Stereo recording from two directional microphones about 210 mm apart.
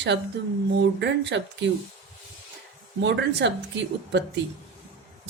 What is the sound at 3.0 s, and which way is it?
Speech, 60° right (ahead or behind).